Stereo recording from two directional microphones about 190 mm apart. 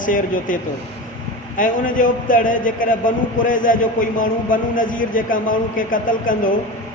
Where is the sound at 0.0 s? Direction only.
45° left (ahead or behind).